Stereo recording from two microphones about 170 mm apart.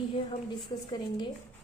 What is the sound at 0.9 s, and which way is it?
Speech, 25° left (ahead or behind).